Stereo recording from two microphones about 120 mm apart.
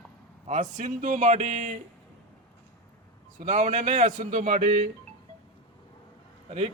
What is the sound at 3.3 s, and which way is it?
A man's voice, 80° right.